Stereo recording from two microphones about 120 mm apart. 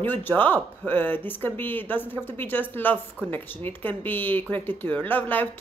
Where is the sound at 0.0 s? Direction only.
15° left (ahead or behind).